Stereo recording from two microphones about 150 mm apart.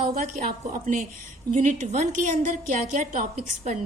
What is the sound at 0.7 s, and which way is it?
A woman's voice, 60° right (ahead or behind).